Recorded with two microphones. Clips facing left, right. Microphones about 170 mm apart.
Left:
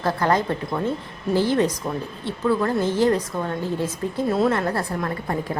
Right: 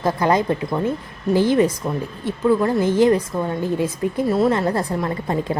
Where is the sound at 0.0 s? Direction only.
15° right (ahead or behind).